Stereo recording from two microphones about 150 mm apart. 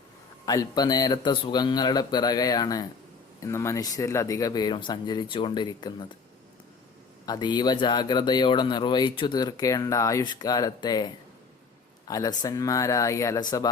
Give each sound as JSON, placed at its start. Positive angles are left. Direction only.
{"t": 0.4, "sound": "speech", "side_deg": 25}
{"t": 7.3, "sound": "speech", "side_deg": 30}